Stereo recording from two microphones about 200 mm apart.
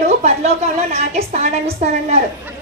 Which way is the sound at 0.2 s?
35° right (ahead or behind).